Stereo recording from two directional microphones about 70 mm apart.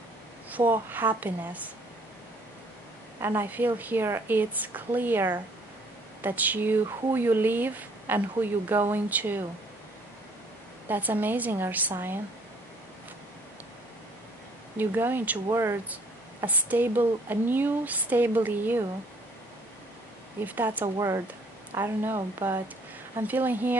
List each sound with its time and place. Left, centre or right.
0.5 s speech: right
3.4 s speech: right
10.9 s a woman's voice: right
14.8 s speech: right
15.5 s a woman's voice: right
16.4 s speech: right
20.4 s speech: right
20.8 s a woman's voice: right